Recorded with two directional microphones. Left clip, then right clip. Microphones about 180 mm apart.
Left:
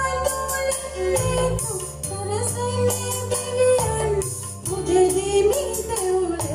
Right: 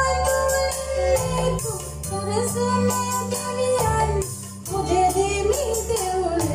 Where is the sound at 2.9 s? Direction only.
45° left (ahead or behind).